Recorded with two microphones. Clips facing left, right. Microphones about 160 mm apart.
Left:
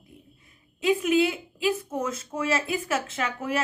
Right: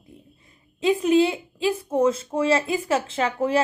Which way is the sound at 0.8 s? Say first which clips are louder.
Right 4 dB; 30° right (ahead or behind).